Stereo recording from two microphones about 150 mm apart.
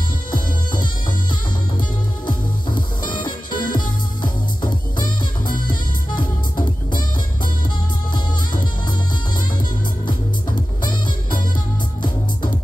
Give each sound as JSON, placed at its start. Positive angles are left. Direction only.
{"t": 2.2, "sound": "music", "side_deg": 30}
{"t": 6.5, "sound": "music", "side_deg": 30}